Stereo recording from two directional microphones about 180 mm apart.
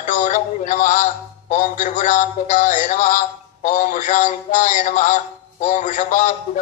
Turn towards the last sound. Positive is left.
turn(degrees=45)  # may be behind; listen again after turning